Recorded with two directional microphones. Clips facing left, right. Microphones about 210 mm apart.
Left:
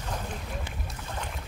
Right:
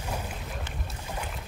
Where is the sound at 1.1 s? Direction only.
10° right (ahead or behind).